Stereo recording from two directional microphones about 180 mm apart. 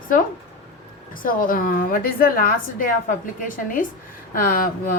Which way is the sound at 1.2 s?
50° left (ahead or behind).